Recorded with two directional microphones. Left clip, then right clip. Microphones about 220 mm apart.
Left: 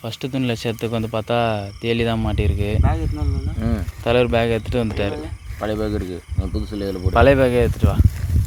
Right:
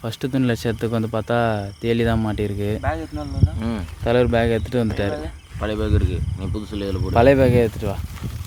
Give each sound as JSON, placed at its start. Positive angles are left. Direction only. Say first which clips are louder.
{"t": 0.0, "sound": "speech", "louder": "right 2 dB", "side_deg": -20}
{"t": 4.0, "sound": "speech", "louder": "left 1 dB", "side_deg": -10}
{"t": 5.5, "sound": "speech", "louder": "left 1 dB", "side_deg": 30}
{"t": 7.1, "sound": "speech", "louder": "even", "side_deg": -10}